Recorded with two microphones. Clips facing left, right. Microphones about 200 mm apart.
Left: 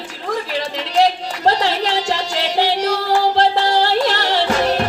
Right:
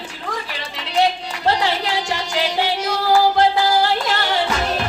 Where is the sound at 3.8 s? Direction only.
35° left (ahead or behind).